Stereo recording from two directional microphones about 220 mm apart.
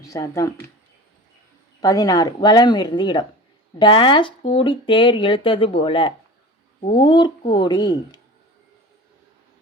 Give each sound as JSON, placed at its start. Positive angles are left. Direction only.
{"t": 0.0, "sound": "speech", "side_deg": 15}
{"t": 1.8, "sound": "speech", "side_deg": 15}